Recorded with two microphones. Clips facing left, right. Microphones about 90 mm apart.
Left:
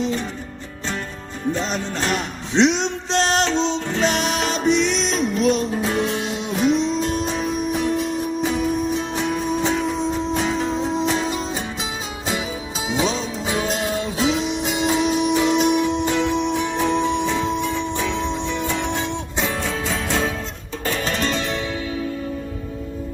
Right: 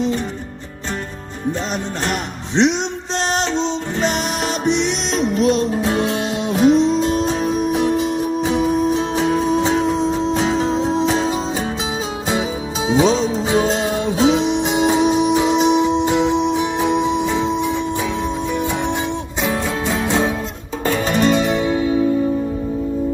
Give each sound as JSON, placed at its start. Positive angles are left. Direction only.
{"t": 3.2, "sound": "music", "side_deg": -10}
{"t": 4.9, "sound": "music", "side_deg": -30}
{"t": 5.8, "sound": "music", "side_deg": -40}
{"t": 7.3, "sound": "music", "side_deg": -30}
{"t": 12.9, "sound": "music", "side_deg": -30}
{"t": 19.4, "sound": "music", "side_deg": -5}
{"t": 20.1, "sound": "music", "side_deg": -20}